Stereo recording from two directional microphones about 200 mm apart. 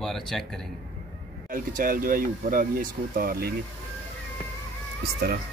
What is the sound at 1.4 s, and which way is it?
Speech, 45° right (ahead or behind).